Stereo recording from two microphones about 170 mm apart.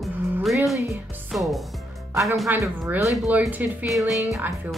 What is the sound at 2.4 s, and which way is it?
Speech, 15° right (ahead or behind).